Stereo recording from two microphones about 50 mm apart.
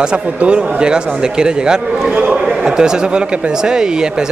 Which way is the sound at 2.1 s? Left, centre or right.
Right.